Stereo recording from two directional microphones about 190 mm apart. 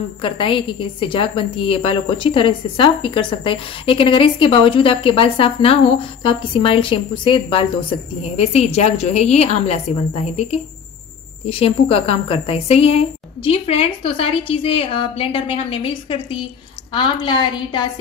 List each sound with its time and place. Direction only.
0.2 s a woman's voice: 25° left (ahead or behind)